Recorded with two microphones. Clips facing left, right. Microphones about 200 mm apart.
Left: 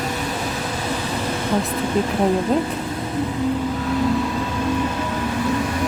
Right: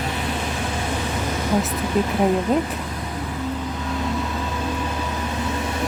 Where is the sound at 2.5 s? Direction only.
5° right (ahead or behind).